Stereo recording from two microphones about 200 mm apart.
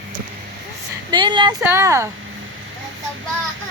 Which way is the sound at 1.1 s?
25° right (ahead or behind).